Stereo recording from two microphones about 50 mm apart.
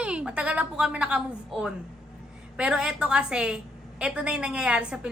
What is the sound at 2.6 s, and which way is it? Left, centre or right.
A woman's voice, centre.